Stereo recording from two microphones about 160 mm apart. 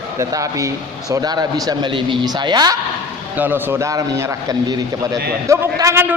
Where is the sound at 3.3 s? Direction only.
10° right (ahead or behind).